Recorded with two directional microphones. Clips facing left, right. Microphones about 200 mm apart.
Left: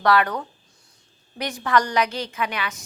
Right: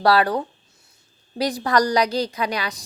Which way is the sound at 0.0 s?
35° right (ahead or behind).